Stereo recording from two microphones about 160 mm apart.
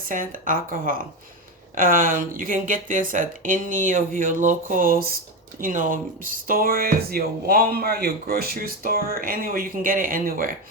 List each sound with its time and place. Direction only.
0.1 s speech: 60° right (ahead or behind)